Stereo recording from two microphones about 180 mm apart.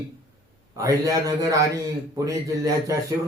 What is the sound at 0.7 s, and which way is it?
A man's voice, 20° right (ahead or behind).